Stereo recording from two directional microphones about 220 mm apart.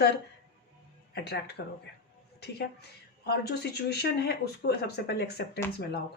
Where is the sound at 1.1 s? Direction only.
50° left (ahead or behind).